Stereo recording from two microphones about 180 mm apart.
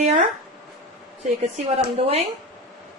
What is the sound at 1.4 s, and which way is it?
Speech, 35° right (ahead or behind).